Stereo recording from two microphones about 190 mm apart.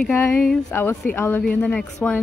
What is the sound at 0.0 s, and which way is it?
Speech, 10° left (ahead or behind).